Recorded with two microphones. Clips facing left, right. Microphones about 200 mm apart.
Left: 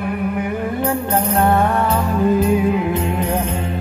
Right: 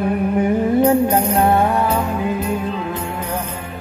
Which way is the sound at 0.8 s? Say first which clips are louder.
Right 6 dB; 20° right (ahead or behind).